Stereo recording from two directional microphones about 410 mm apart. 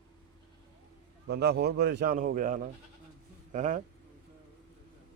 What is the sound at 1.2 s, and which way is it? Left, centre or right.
A man's voice, right.